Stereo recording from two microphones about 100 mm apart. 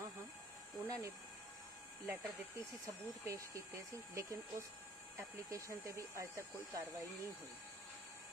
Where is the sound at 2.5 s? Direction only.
30° right (ahead or behind).